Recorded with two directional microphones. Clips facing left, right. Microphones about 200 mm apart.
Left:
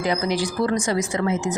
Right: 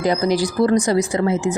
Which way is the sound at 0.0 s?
40° right (ahead or behind).